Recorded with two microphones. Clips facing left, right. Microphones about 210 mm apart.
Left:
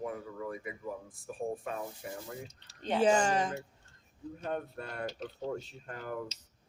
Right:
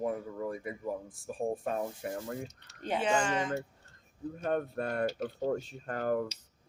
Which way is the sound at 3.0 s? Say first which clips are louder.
Left 4 dB; 40° left (ahead or behind).